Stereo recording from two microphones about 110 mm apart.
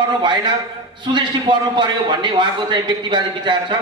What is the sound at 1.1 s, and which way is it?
A man's voice, 45° right (ahead or behind).